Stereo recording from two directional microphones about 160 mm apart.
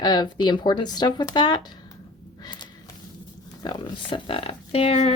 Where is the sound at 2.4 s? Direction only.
30° left (ahead or behind).